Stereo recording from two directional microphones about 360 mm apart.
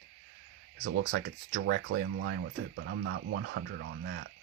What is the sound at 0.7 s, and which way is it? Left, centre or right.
Speech, right.